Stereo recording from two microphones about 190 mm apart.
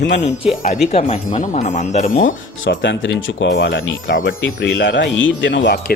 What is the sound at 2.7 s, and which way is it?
Speech, 75° left (ahead or behind).